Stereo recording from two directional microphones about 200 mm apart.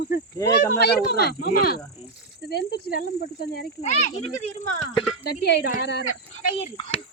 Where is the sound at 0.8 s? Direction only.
55° left (ahead or behind).